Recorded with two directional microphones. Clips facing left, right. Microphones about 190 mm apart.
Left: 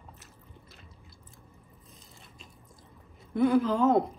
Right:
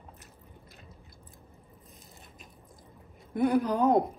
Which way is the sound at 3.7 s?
15° right (ahead or behind).